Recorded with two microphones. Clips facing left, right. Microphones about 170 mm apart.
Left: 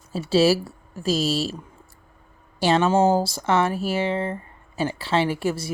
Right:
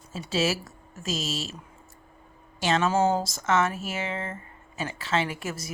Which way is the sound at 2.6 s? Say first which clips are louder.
Left 5 dB; 35° left (ahead or behind).